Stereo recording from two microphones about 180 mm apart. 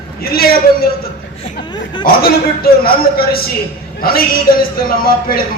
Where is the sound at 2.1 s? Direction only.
55° left (ahead or behind).